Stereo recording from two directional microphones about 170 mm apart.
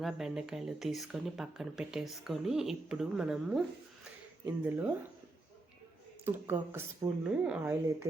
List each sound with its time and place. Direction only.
0.0 s speech: centre (ahead or behind)
6.2 s speech: 15° right (ahead or behind)